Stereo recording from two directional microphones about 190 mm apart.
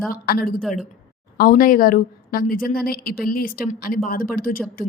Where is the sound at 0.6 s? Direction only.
Centre (ahead or behind).